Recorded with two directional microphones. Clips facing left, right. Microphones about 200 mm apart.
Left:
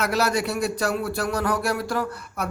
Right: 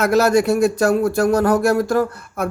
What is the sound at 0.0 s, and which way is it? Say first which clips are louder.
Speech: right 8 dB; 45° right (ahead or behind).